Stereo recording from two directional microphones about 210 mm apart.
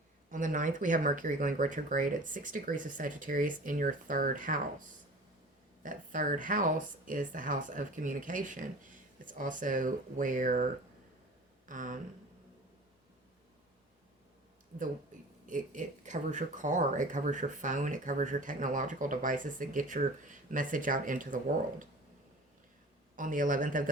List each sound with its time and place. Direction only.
0.3 s speech: 40° right (ahead or behind)
11.7 s speech: 40° right (ahead or behind)
15.4 s speech: 40° right (ahead or behind)
23.1 s speech: 40° right (ahead or behind)